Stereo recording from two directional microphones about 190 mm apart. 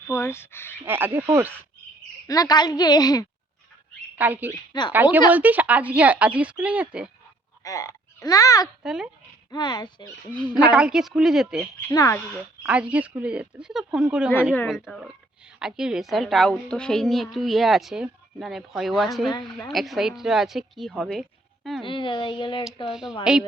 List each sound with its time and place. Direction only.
0.1 s speech: 15° left (ahead or behind)
0.9 s speech: 10° right (ahead or behind)
2.2 s speech: 20° left (ahead or behind)
4.1 s speech: 10° right (ahead or behind)
4.7 s speech: 20° left (ahead or behind)
5.3 s speech: 10° right (ahead or behind)
7.6 s speech: 15° left (ahead or behind)
8.8 s speech: centre (ahead or behind)
9.5 s speech: 20° left (ahead or behind)
10.6 s a woman's voice: 5° right (ahead or behind)
11.9 s speech: 15° left (ahead or behind)
12.3 s a woman's voice: 5° right (ahead or behind)
21.8 s speech: 25° left (ahead or behind)
22.9 s a woman's voice: 5° right (ahead or behind)